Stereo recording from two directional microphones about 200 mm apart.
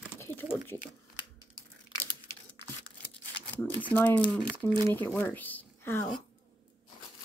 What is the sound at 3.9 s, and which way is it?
Speech, 10° left (ahead or behind).